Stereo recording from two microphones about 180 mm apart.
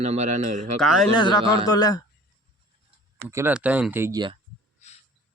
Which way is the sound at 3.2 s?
15° right (ahead or behind).